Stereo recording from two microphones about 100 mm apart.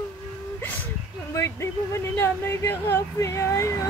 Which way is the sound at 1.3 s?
25° left (ahead or behind).